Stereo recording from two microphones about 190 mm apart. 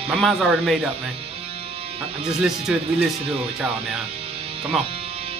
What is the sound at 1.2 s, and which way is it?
Music, 30° right (ahead or behind).